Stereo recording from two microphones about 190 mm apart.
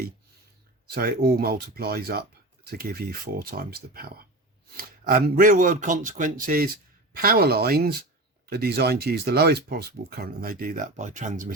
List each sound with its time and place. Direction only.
0.9 s speech: 50° right (ahead or behind)